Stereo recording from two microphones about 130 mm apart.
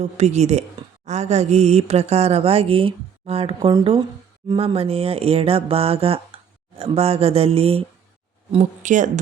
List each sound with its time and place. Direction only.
0.0 s mantra: 60° right (ahead or behind)
4.4 s speech: 45° right (ahead or behind)
8.8 s speech: 75° right (ahead or behind)